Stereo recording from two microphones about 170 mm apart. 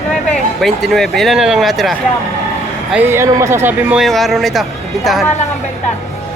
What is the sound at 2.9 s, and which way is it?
Speech, 10° right (ahead or behind).